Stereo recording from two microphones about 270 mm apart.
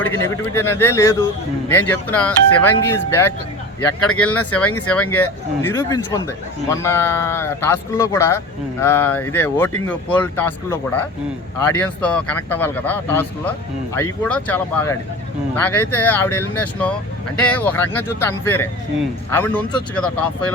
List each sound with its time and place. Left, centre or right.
0.0 s a man's voice: centre